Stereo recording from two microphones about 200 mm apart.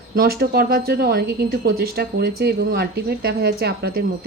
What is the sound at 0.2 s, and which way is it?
Speech, 50° right (ahead or behind).